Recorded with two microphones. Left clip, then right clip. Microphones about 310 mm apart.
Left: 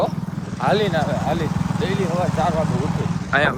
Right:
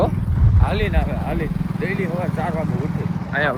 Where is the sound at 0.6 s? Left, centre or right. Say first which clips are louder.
Left 6 dB; centre.